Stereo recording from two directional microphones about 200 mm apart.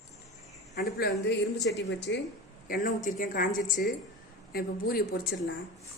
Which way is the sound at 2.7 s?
45° left (ahead or behind).